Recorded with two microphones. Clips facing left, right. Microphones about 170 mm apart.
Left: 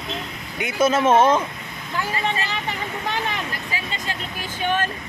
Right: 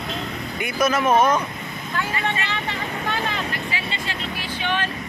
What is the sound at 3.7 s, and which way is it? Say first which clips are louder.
Vehicle: even; 45° left (ahead or behind).